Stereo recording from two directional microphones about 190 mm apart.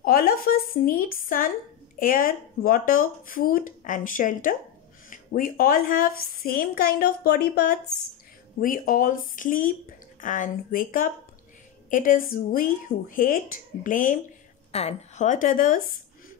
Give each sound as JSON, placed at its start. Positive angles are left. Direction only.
{"t": 0.0, "sound": "speech", "side_deg": 50}
{"t": 14.7, "sound": "speech", "side_deg": 35}